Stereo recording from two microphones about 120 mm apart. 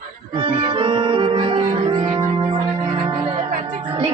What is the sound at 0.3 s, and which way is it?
Music, 40° right (ahead or behind).